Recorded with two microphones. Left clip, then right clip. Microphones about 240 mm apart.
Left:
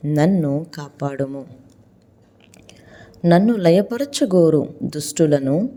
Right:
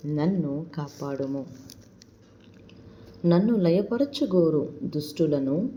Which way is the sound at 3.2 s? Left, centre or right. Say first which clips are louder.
Left 8 dB; left.